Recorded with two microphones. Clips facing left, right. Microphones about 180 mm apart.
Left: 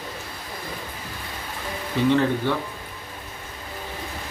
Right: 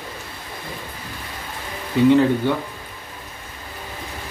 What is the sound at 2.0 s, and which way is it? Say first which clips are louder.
Speech: right 5 dB; 10° right (ahead or behind).